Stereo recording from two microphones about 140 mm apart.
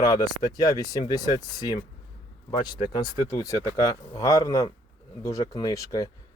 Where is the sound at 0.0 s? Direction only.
25° left (ahead or behind).